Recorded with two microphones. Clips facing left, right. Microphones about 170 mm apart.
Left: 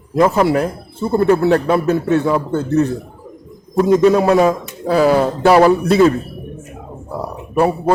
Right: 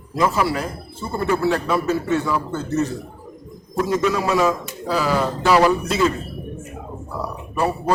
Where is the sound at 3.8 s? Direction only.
35° left (ahead or behind).